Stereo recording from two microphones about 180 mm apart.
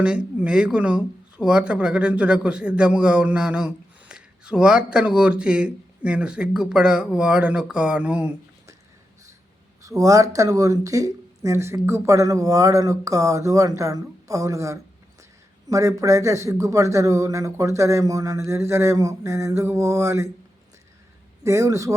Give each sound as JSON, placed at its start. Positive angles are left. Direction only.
{"t": 0.0, "sound": "speech", "side_deg": -5}
{"t": 9.8, "sound": "a man's voice", "side_deg": -20}
{"t": 21.4, "sound": "a man's voice", "side_deg": -15}